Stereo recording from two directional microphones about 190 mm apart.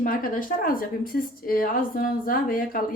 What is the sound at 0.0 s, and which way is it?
A woman's voice, 45° left (ahead or behind).